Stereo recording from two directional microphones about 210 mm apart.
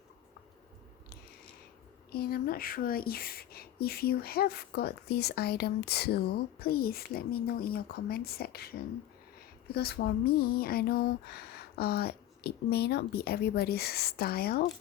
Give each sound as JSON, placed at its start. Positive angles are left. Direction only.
{"t": 2.1, "sound": "speech", "side_deg": 45}